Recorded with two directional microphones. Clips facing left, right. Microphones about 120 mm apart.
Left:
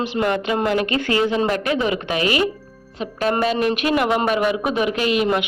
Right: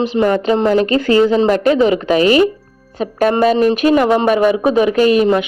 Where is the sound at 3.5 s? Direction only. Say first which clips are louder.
Right 7 dB; 35° right (ahead or behind).